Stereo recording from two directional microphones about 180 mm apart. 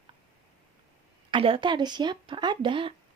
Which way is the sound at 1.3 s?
30° right (ahead or behind).